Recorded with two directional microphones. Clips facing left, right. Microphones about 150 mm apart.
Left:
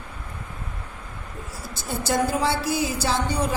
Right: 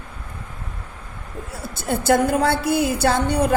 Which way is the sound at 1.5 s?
55° right (ahead or behind).